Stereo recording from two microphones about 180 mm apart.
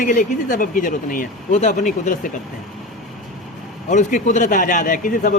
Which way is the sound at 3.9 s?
45° left (ahead or behind).